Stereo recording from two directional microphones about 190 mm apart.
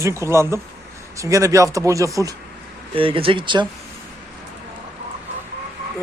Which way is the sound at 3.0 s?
30° right (ahead or behind).